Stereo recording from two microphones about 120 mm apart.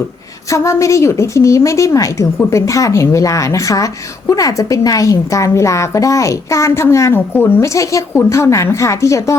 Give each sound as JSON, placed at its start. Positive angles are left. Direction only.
{"t": 0.5, "sound": "a woman's voice", "side_deg": 25}